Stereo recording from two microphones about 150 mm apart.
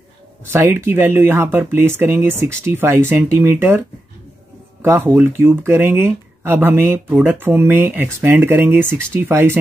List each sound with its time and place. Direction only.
0.5 s speech: 15° right (ahead or behind)
4.8 s speech: 15° right (ahead or behind)